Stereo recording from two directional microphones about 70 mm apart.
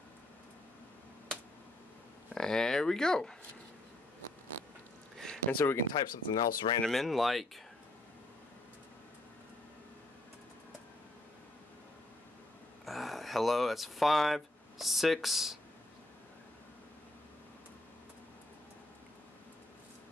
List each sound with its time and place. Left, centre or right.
2.3 s speech: centre
5.1 s a sound: centre
5.9 s speech: left
6.8 s speech: centre
12.8 s a sound: centre
15.2 s speech: centre